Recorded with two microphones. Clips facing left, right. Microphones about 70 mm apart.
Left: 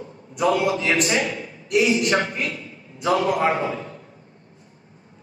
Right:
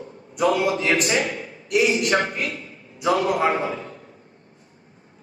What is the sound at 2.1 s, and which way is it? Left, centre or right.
Speech, right.